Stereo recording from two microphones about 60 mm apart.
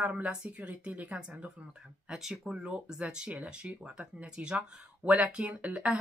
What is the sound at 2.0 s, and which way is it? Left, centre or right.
Speech, centre.